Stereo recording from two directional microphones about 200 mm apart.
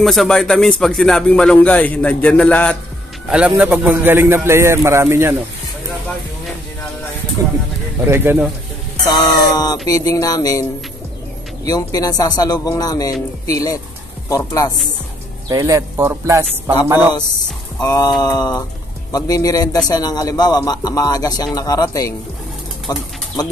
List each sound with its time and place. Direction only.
0.0 s a man's voice: centre (ahead or behind)
3.3 s a man's voice: 5° right (ahead or behind)
8.0 s a man's voice: 10° right (ahead or behind)
9.0 s speech: 20° left (ahead or behind)
11.6 s speech: 20° left (ahead or behind)
15.5 s a man's voice: 15° right (ahead or behind)
17.7 s speech: 15° left (ahead or behind)